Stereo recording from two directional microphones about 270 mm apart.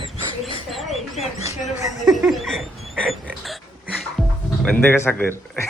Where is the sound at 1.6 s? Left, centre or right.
Left.